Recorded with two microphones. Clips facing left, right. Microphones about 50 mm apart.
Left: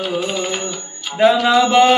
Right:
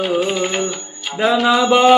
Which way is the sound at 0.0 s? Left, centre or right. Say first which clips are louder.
Right 3 dB; right.